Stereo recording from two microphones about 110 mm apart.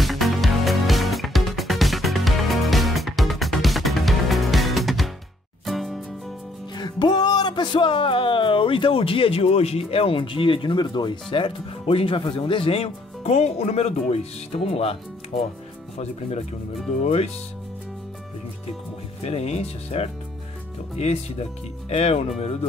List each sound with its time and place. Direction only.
0.0 s music: centre (ahead or behind)
6.7 s music: 45° left (ahead or behind); by 15.4 s 60° left (ahead or behind)
16.0 s speech: 75° left (ahead or behind)
19.2 s speech: 70° left (ahead or behind)